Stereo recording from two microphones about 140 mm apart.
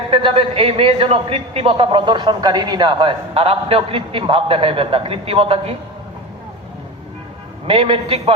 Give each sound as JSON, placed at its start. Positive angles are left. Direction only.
{"t": 0.1, "sound": "a man's voice", "side_deg": -40}
{"t": 7.7, "sound": "a man's voice", "side_deg": -40}